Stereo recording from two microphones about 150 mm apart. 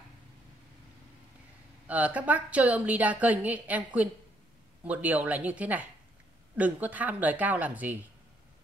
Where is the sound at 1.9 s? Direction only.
10° right (ahead or behind).